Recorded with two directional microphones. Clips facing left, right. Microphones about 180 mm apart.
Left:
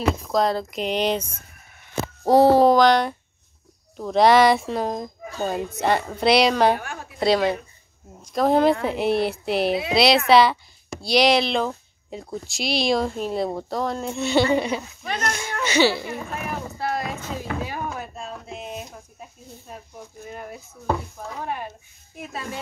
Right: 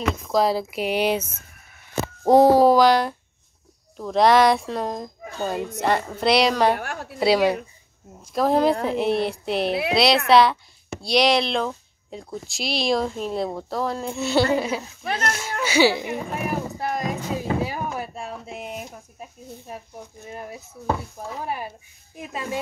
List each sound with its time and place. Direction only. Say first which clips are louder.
0.3 s speech: right 5 dB; 5° right (ahead or behind)
6.8 s a woman's voice: right 3 dB; 75° right (ahead or behind)
7.2 s speech: right 1 dB; 10° right (ahead or behind)
15.3 s a sound: even; 5° right (ahead or behind)
20.3 s speech: right 4 dB; 5° right (ahead or behind)